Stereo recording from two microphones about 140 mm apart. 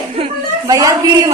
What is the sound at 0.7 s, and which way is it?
Speech, 25° right (ahead or behind).